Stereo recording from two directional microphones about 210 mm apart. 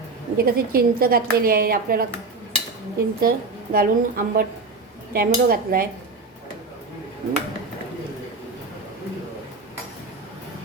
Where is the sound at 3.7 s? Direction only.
45° right (ahead or behind).